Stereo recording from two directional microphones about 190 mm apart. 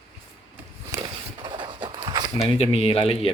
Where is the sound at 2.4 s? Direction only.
30° left (ahead or behind).